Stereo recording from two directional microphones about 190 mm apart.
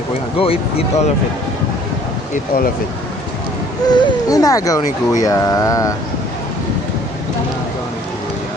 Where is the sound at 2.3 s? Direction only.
50° left (ahead or behind).